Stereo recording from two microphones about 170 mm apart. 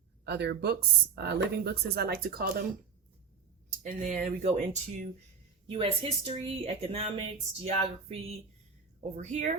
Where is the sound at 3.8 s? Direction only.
50° right (ahead or behind).